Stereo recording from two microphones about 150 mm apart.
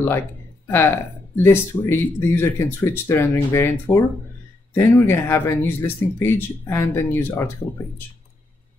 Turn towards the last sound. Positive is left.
turn(degrees=15)  # may be behind; listen again after turning